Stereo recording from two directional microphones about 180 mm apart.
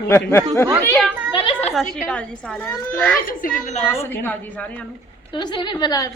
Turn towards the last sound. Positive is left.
turn(degrees=20)  # may be behind; listen again after turning